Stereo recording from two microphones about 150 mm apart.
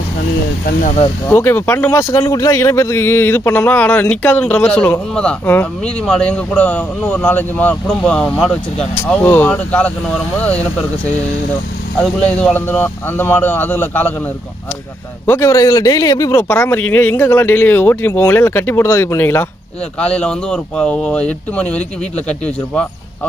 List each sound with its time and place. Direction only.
1.3 s speech: 15° left (ahead or behind)
12.4 s speech: 10° left (ahead or behind)
15.2 s speech: 20° left (ahead or behind)